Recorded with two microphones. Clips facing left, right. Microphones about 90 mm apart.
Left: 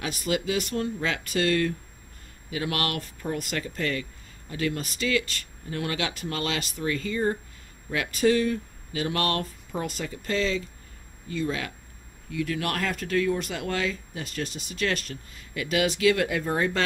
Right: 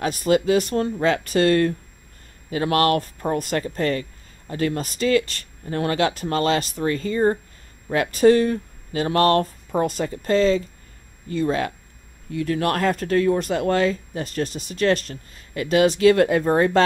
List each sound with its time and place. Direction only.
0.0 s speech: 40° right (ahead or behind)